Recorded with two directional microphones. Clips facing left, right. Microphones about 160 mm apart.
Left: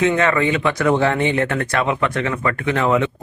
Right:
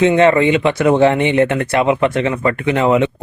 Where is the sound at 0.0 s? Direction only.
25° right (ahead or behind).